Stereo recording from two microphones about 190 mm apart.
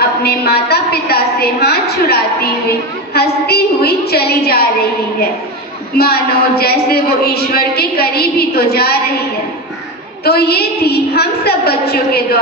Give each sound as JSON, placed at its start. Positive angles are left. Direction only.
{"t": 0.2, "sound": "speech", "side_deg": 55}
{"t": 5.9, "sound": "speech", "side_deg": 55}
{"t": 10.2, "sound": "speech", "side_deg": 55}